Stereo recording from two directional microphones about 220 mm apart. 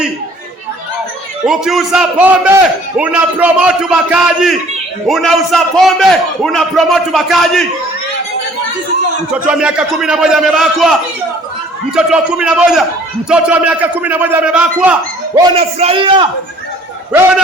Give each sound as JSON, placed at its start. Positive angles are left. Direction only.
{"t": 1.5, "sound": "a man's voice", "side_deg": 0}
{"t": 9.3, "sound": "a man's voice", "side_deg": -5}
{"t": 11.9, "sound": "a man's voice", "side_deg": -5}
{"t": 15.4, "sound": "a man's voice", "side_deg": -25}
{"t": 17.1, "sound": "a man's voice", "side_deg": -10}